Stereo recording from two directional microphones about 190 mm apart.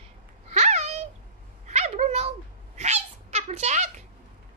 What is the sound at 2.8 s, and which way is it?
Cat, 35° right (ahead or behind).